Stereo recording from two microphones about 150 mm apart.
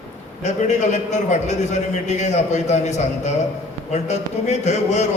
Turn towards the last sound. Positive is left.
turn(degrees=50)  # may be behind; listen again after turning